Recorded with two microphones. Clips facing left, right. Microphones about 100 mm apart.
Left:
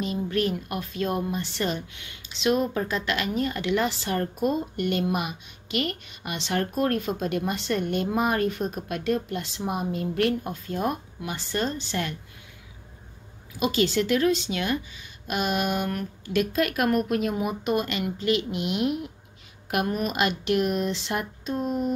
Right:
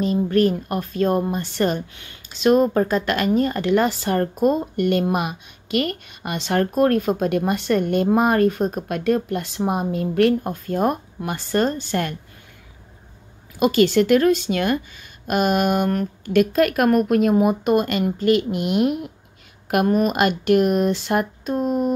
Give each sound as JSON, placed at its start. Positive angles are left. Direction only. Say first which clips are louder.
{"t": 0.0, "sound": "a woman's voice", "louder": "right 8 dB", "side_deg": -40}
{"t": 13.6, "sound": "a woman's voice", "louder": "right 7 dB", "side_deg": -55}